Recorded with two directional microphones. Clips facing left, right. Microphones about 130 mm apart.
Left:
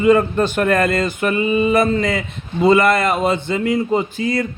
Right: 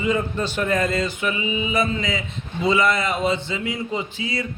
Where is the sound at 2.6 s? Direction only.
55° left (ahead or behind).